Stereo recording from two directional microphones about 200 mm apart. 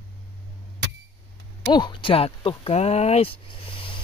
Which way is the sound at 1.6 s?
20° left (ahead or behind).